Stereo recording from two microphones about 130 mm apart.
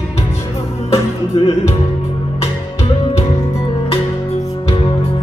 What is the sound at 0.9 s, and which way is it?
Music, 50° left (ahead or behind).